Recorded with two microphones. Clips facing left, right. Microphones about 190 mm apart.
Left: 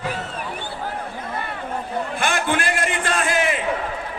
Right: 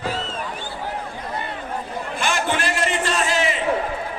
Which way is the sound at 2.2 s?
55° left (ahead or behind).